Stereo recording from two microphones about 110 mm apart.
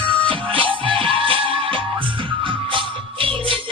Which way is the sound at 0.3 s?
50° right (ahead or behind).